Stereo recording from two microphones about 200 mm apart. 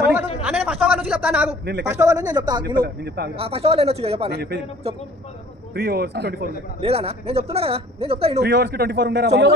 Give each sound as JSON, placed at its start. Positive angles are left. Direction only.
{"t": 0.4, "sound": "a sound", "side_deg": -5}
{"t": 1.9, "sound": "speech", "side_deg": -15}
{"t": 2.6, "sound": "a man's voice", "side_deg": -50}
{"t": 3.3, "sound": "speech", "side_deg": -30}
{"t": 4.3, "sound": "a man's voice", "side_deg": -55}
{"t": 5.8, "sound": "a man's voice", "side_deg": -50}
{"t": 6.8, "sound": "speech", "side_deg": -30}
{"t": 8.4, "sound": "a man's voice", "side_deg": -55}